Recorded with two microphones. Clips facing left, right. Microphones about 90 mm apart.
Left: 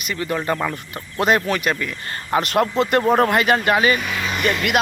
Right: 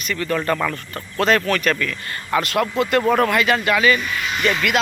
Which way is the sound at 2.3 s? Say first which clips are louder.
Left 1 dB; 30° left (ahead or behind).